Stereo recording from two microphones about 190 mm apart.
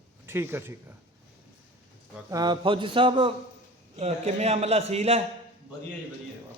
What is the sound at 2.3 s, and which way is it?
A man's voice, 20° right (ahead or behind).